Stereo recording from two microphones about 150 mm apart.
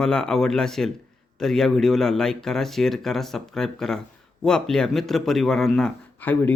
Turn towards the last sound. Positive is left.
turn(degrees=10)  # may be behind; listen again after turning